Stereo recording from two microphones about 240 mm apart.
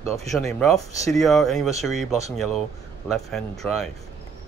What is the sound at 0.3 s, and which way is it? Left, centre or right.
Speech, centre.